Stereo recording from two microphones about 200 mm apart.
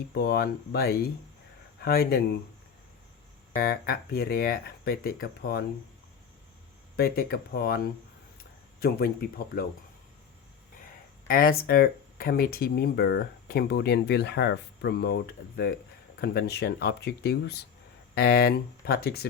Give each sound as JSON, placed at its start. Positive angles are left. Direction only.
{"t": 0.1, "sound": "speech", "side_deg": 55}
{"t": 3.5, "sound": "speech", "side_deg": 50}
{"t": 6.9, "sound": "speech", "side_deg": 50}
{"t": 8.8, "sound": "speech", "side_deg": 50}
{"t": 11.3, "sound": "speech", "side_deg": 45}